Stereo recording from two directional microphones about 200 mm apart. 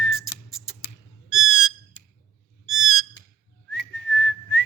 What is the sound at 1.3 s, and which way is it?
Squawk, centre (ahead or behind).